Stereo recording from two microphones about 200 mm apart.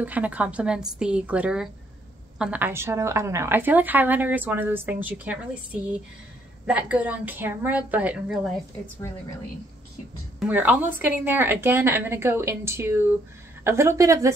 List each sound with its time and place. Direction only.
0.0 s a woman's voice: 10° right (ahead or behind)
6.6 s a woman's voice: 5° right (ahead or behind)
10.4 s a woman's voice: 10° right (ahead or behind)